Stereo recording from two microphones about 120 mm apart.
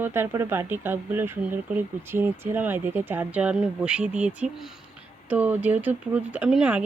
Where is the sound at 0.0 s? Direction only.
20° right (ahead or behind).